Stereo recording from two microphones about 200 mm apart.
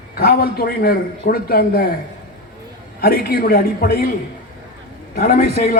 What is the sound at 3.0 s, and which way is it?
A man's voice, 50° left (ahead or behind).